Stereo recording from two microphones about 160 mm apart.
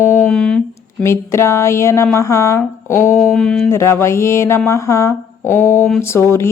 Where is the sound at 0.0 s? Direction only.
15° left (ahead or behind).